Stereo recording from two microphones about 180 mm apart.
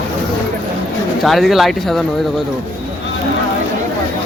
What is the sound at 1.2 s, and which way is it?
Speech, centre (ahead or behind).